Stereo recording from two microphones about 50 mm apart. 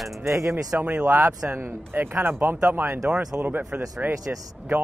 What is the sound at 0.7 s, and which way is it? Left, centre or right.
Speech, right.